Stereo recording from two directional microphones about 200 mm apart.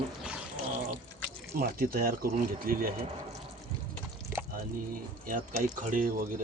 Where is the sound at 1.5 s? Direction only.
50° right (ahead or behind).